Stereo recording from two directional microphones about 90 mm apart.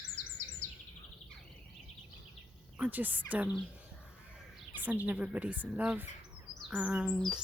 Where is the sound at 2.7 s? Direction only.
15° right (ahead or behind).